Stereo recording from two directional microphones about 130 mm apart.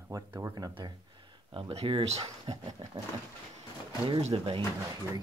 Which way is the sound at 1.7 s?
45° right (ahead or behind).